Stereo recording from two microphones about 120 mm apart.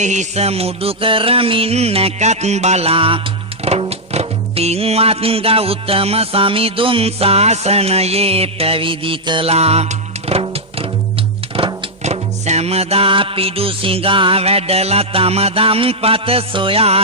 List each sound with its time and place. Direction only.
0.0 s music: 80° right; by 9.5 s 45° right (ahead or behind)
9.5 s music: 60° right (ahead or behind)
12.0 s music: 65° right (ahead or behind)